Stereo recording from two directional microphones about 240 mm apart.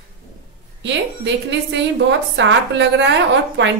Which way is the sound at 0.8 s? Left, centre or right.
Right.